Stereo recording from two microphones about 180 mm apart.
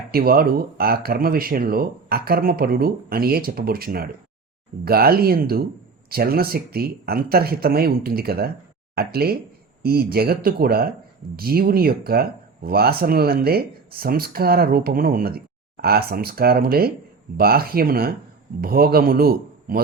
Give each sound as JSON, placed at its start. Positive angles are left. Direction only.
{"t": 0.1, "sound": "speech", "side_deg": -55}